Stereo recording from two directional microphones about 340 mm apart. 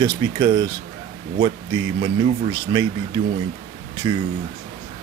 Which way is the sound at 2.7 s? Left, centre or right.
Centre.